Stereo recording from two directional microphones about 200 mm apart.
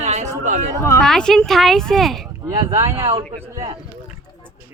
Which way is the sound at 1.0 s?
5° left (ahead or behind).